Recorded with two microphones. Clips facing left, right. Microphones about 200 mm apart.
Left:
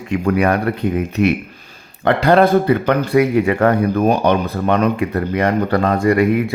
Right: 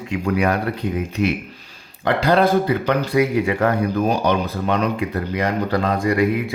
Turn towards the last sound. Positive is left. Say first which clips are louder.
# left 4 dB
turn(degrees=55)  # may be behind; listen again after turning